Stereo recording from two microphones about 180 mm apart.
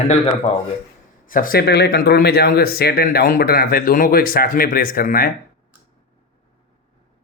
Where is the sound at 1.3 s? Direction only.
50° left (ahead or behind).